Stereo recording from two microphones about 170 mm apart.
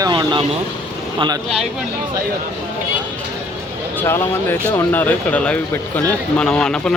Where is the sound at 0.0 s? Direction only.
25° right (ahead or behind).